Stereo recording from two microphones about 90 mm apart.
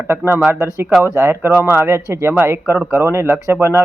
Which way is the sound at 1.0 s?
25° right (ahead or behind).